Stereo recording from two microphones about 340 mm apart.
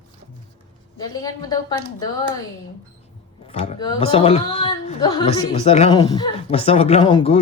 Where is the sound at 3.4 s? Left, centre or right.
Centre.